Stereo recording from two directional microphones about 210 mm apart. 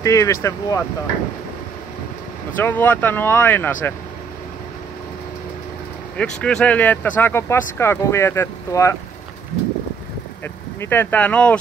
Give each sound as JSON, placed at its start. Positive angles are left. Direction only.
{"t": 0.0, "sound": "speech", "side_deg": 15}
{"t": 2.5, "sound": "speech", "side_deg": 10}
{"t": 6.1, "sound": "speech", "side_deg": 5}
{"t": 10.4, "sound": "speech", "side_deg": 10}